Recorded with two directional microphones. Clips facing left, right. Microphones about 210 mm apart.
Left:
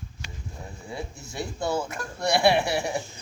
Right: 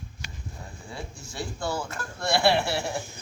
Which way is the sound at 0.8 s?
20° left (ahead or behind).